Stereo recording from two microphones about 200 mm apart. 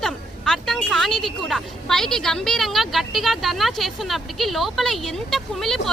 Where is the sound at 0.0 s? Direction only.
Centre (ahead or behind).